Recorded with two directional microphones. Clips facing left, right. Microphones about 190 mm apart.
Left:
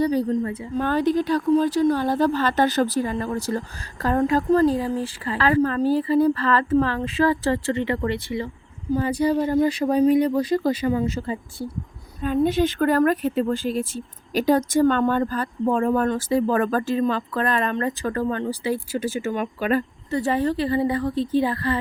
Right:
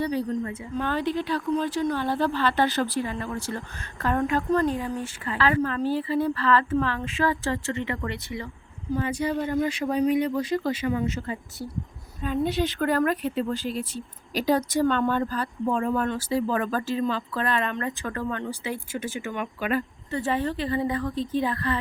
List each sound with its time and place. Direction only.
0.0 s speech: 40° left (ahead or behind)
12.2 s speech: 50° left (ahead or behind); by 21.8 s 30° left (ahead or behind)